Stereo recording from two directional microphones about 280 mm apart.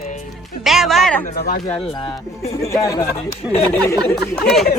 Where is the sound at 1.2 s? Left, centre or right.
Left.